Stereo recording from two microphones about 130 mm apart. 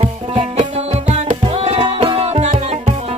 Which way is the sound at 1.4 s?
50° right (ahead or behind).